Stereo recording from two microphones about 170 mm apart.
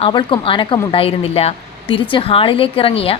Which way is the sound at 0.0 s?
30° left (ahead or behind).